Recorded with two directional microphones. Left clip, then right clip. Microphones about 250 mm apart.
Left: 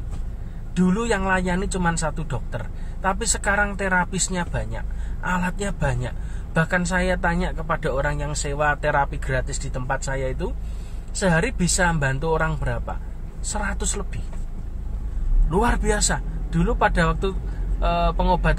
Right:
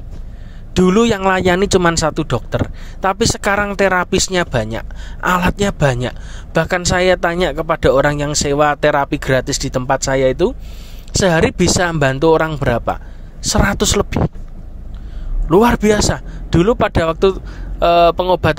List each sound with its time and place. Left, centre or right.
0.7 s speech: right
15.5 s speech: right